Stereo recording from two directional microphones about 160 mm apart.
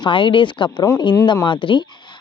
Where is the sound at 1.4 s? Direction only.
30° left (ahead or behind).